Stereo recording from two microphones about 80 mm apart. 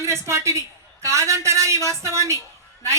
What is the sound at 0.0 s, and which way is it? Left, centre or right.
A woman's voice, right.